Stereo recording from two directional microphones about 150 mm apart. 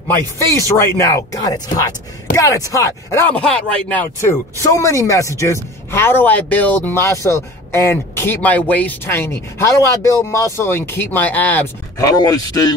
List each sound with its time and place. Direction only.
0.6 s speech: 20° left (ahead or behind)
12.1 s speech: 25° left (ahead or behind)